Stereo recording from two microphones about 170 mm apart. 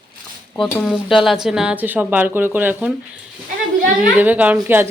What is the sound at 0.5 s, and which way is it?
Speech, 5° left (ahead or behind).